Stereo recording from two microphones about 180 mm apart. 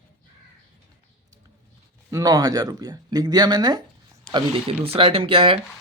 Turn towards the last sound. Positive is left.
turn(degrees=-30)  # may be behind; listen again after turning